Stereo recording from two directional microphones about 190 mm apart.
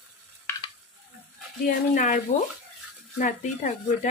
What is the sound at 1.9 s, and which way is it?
Speech, 45° left (ahead or behind).